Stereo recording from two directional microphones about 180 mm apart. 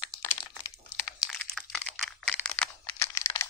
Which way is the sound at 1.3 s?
5° left (ahead or behind).